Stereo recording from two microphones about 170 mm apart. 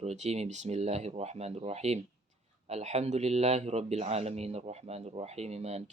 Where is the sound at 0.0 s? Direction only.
40° right (ahead or behind).